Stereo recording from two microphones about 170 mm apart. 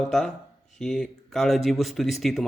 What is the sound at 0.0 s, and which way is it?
Speech, centre (ahead or behind).